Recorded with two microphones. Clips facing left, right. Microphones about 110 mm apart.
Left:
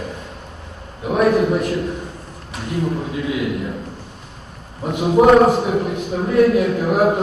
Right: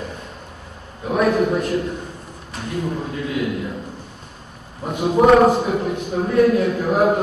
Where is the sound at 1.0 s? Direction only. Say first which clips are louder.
Left 2 dB; 10° left (ahead or behind).